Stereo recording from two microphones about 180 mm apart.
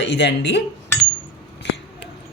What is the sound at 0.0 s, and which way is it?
Speech, 70° left (ahead or behind).